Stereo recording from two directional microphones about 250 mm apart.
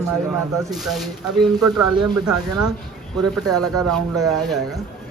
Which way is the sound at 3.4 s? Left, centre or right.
Right.